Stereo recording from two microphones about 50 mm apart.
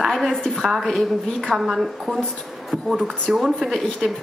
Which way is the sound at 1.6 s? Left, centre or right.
Centre.